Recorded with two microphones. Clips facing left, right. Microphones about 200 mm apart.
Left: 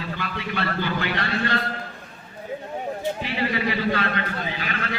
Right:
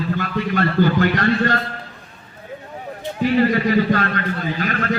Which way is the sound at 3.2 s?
45° right (ahead or behind).